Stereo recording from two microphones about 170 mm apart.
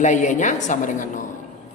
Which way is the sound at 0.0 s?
45° left (ahead or behind).